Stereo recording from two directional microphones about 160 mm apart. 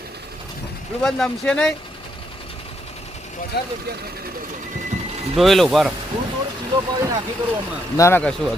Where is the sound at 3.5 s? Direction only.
90° left.